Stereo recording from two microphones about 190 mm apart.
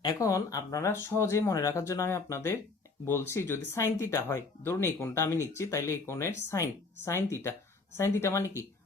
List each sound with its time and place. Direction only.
0.0 s speech: 20° left (ahead or behind)